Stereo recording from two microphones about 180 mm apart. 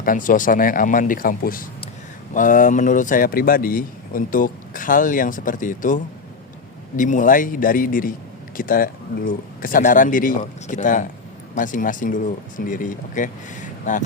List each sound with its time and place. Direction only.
0.0 s speech: 50° left (ahead or behind)